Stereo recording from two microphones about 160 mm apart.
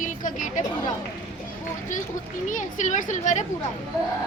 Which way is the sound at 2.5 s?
50° left (ahead or behind).